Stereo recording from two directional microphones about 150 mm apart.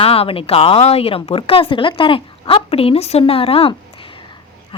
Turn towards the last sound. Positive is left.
turn(degrees=40)  # may be behind; listen again after turning